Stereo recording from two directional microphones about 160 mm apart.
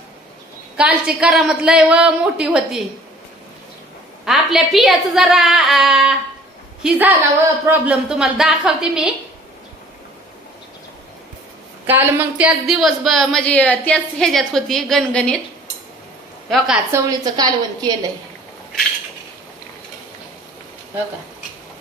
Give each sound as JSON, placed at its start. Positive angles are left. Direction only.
{"t": 0.7, "sound": "a woman's voice", "side_deg": -5}
{"t": 4.2, "sound": "a woman's voice", "side_deg": 0}
{"t": 11.8, "sound": "speech", "side_deg": -10}
{"t": 16.4, "sound": "a woman's voice", "side_deg": 0}
{"t": 16.9, "sound": "a woman's voice", "side_deg": -25}